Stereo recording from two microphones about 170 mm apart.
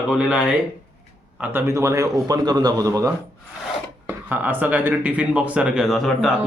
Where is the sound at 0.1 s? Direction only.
5° right (ahead or behind).